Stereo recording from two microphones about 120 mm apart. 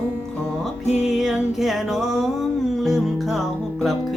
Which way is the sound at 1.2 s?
5° right (ahead or behind).